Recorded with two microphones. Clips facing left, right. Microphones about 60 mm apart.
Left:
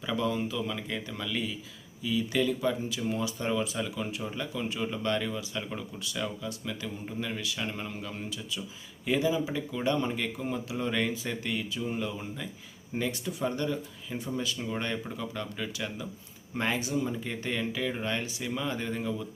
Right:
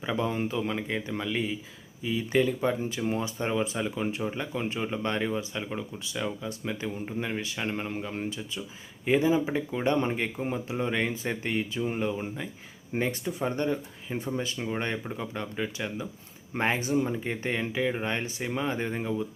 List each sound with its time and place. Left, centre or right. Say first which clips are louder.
0.0 s speech: right 1 dB; right
5.6 s speech: right 2 dB; centre